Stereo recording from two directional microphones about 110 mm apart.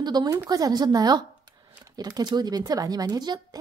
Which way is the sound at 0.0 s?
40° right (ahead or behind).